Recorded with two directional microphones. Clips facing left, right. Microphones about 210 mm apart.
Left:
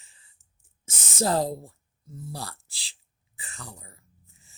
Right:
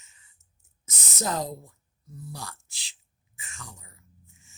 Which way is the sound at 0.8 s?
30° left (ahead or behind).